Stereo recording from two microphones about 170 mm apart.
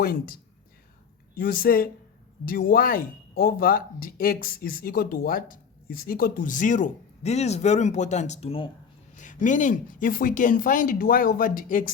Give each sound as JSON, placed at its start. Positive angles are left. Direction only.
{"t": 0.0, "sound": "speech", "side_deg": 60}
{"t": 1.4, "sound": "speech", "side_deg": 60}
{"t": 9.1, "sound": "speech", "side_deg": 50}